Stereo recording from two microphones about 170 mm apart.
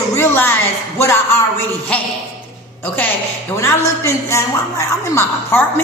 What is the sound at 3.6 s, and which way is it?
A man's voice, 15° left (ahead or behind).